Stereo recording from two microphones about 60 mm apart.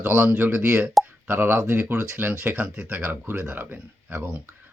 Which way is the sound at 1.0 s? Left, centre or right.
Centre.